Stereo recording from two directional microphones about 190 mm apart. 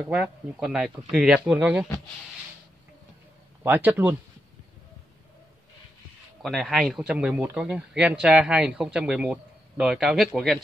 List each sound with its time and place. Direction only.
0.0 s speech: 5° right (ahead or behind)
3.6 s speech: 10° right (ahead or behind)
6.4 s speech: centre (ahead or behind)